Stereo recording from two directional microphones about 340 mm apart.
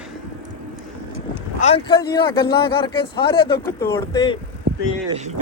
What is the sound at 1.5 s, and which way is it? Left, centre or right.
Speech, centre.